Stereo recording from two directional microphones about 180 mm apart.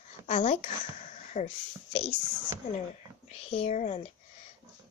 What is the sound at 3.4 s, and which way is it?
Speech, 35° left (ahead or behind).